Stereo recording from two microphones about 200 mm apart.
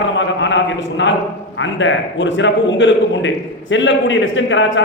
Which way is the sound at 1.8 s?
70° left (ahead or behind).